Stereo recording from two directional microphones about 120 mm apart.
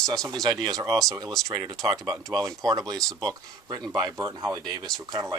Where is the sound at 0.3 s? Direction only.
35° right (ahead or behind).